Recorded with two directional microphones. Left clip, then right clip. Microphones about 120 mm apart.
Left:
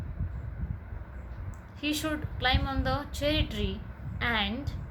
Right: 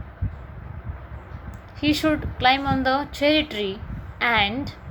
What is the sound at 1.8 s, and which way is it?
A woman's voice, 25° right (ahead or behind).